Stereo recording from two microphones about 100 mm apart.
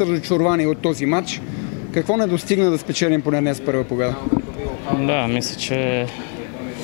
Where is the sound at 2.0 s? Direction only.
25° left (ahead or behind).